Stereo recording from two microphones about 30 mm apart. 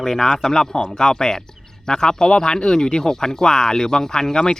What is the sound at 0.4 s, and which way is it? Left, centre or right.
Speech, left.